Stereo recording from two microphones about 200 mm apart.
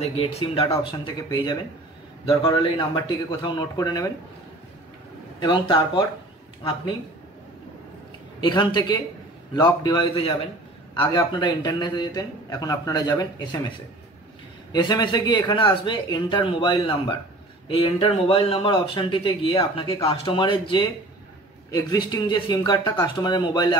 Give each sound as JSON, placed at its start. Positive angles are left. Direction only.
{"t": 0.0, "sound": "a man's voice", "side_deg": 30}
{"t": 5.4, "sound": "a man's voice", "side_deg": 25}
{"t": 8.4, "sound": "a man's voice", "side_deg": 20}
{"t": 14.7, "sound": "a man's voice", "side_deg": 20}